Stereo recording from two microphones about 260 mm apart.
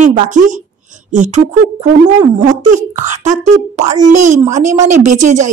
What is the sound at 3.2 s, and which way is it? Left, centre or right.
A woman's voice, right.